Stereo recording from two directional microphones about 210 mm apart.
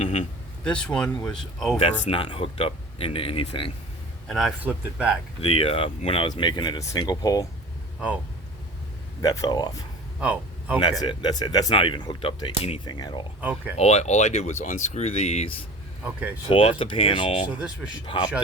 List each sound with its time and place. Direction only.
0.0 s a sound: 30° left (ahead or behind)
0.6 s speech: 5° left (ahead or behind)
1.8 s speech: 25° left (ahead or behind)
4.3 s speech: centre (ahead or behind)
5.4 s speech: 25° left (ahead or behind)
9.2 s speech: 15° left (ahead or behind)
10.2 s a sound: 5° right (ahead or behind)
11.0 s speech: 20° left (ahead or behind)
13.4 s speech: 10° right (ahead or behind)
13.7 s speech: 30° left (ahead or behind)